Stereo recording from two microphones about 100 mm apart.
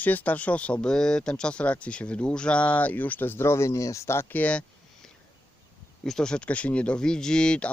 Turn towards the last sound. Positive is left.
turn(degrees=10)  # may be behind; listen again after turning